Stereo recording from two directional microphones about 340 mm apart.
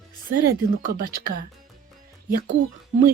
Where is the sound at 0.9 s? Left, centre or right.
Right.